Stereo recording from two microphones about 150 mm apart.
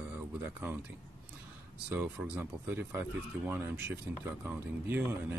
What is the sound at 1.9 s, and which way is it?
A man's voice, 10° right (ahead or behind).